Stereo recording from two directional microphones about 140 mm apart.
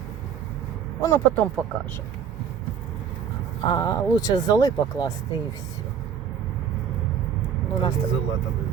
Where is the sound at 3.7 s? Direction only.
30° left (ahead or behind).